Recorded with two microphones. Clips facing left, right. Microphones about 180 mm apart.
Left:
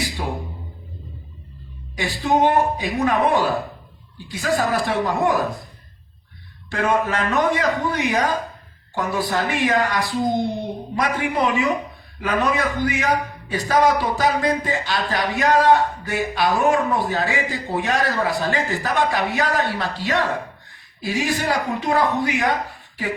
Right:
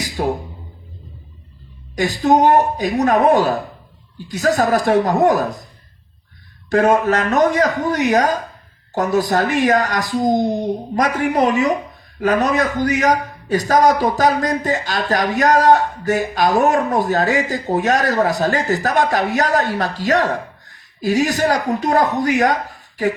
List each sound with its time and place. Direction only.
0.2 s a sound: 50° right (ahead or behind)
2.0 s a man's voice: 40° right (ahead or behind)
6.7 s a man's voice: 45° right (ahead or behind)